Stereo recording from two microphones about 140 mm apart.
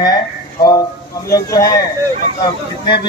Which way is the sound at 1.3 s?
25° left (ahead or behind).